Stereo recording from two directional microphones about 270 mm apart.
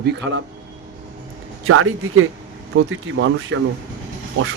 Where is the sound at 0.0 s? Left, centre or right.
Right.